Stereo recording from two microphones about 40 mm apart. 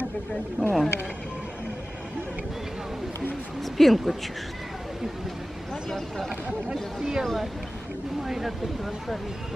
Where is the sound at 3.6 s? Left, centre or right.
Centre.